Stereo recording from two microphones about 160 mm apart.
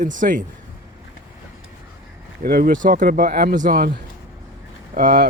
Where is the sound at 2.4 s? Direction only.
65° right (ahead or behind).